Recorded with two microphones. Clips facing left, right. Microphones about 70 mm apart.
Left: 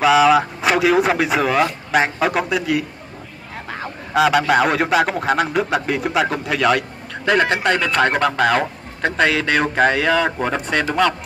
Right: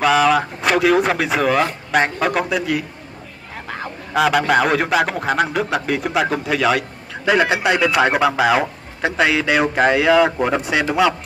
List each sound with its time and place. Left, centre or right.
0.0 s a man's voice: centre